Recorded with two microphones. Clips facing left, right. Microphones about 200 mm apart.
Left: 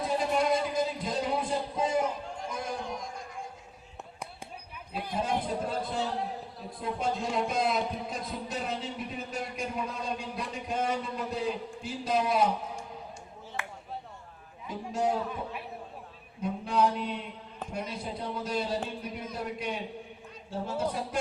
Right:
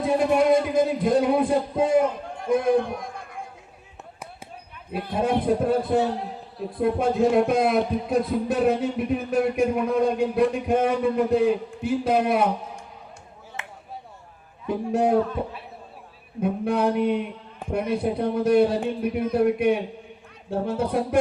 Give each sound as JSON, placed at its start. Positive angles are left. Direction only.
{"t": 0.0, "sound": "a man's voice", "side_deg": -55}
{"t": 5.1, "sound": "speech", "side_deg": -60}
{"t": 13.6, "sound": "a sound", "side_deg": -20}
{"t": 14.7, "sound": "speech", "side_deg": -60}
{"t": 16.4, "sound": "speech", "side_deg": -60}